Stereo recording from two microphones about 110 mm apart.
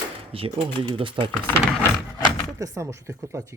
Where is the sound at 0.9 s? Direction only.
50° right (ahead or behind).